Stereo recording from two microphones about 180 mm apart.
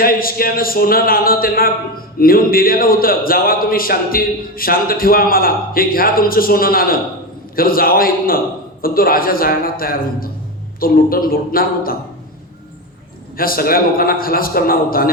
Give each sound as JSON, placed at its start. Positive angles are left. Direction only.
{"t": 0.0, "sound": "a man's voice", "side_deg": 55}
{"t": 13.3, "sound": "a man's voice", "side_deg": 55}